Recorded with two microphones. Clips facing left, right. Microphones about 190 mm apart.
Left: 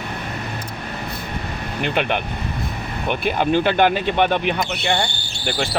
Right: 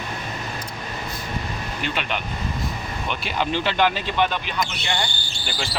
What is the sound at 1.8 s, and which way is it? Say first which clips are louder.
Speech: left 7 dB; 60° left (ahead or behind).